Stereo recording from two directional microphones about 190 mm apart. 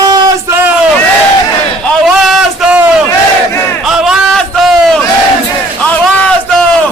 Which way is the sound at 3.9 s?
Centre (ahead or behind).